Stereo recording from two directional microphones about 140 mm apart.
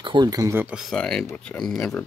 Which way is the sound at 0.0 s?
35° right (ahead or behind).